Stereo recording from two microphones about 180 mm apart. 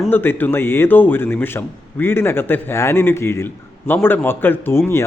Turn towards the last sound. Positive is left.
turn(degrees=15)  # may be behind; listen again after turning